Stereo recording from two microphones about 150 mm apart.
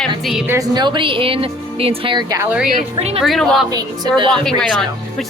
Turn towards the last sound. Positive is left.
turn(degrees=5)  # may be behind; listen again after turning